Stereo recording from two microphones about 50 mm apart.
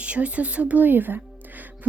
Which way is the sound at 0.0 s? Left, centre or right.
Right.